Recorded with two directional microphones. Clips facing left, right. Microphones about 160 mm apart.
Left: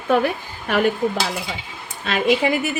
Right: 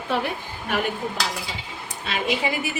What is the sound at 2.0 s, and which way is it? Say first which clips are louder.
Speech: left 7 dB; 55° left (ahead or behind).